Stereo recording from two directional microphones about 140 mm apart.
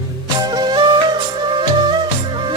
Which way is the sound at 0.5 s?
30° right (ahead or behind).